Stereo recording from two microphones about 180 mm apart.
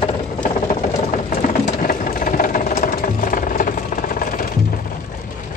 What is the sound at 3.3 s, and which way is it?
Jackhammer, 50° left (ahead or behind).